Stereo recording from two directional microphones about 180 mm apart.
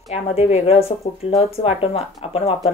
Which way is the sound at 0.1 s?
35° left (ahead or behind).